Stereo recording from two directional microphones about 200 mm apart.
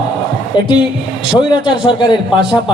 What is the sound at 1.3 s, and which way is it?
A man's voice, 25° left (ahead or behind).